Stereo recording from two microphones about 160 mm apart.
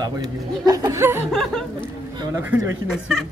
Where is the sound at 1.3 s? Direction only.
5° left (ahead or behind).